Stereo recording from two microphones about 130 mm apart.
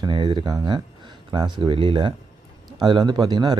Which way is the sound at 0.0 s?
35° right (ahead or behind).